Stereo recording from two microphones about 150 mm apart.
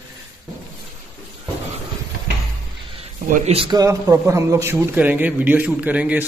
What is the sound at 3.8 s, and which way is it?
A man's voice, 20° right (ahead or behind).